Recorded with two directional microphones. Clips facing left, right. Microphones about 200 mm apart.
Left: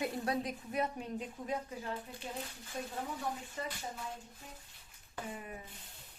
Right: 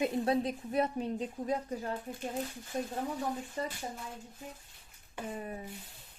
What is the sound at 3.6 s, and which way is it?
Speech, 35° right (ahead or behind).